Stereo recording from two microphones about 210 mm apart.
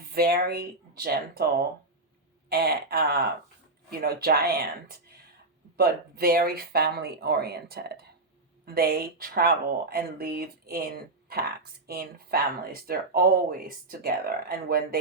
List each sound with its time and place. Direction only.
0.1 s speech: 45° right (ahead or behind)
2.5 s speech: 50° right (ahead or behind)